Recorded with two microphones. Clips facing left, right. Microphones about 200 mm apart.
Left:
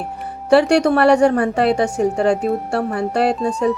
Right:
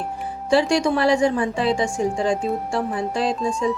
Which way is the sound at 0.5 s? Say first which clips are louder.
Left 5 dB; 65° left (ahead or behind).